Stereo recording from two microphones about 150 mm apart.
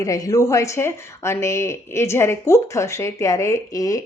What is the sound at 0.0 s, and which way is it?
Speech, 25° left (ahead or behind).